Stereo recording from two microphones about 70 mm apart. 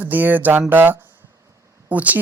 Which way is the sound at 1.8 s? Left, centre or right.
Right.